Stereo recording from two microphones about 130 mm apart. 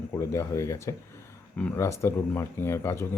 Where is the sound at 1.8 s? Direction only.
20° left (ahead or behind).